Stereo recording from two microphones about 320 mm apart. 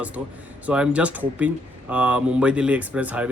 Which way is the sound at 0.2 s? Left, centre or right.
Centre.